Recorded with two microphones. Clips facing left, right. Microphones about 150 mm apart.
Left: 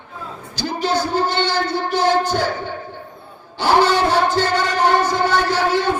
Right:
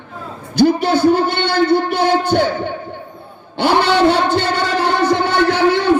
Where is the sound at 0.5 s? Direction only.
60° right (ahead or behind).